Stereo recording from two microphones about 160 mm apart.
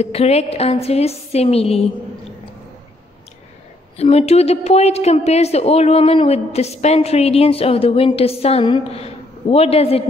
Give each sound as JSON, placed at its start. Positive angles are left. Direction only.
{"t": 0.0, "sound": "a woman's voice", "side_deg": 40}
{"t": 3.9, "sound": "a woman's voice", "side_deg": 40}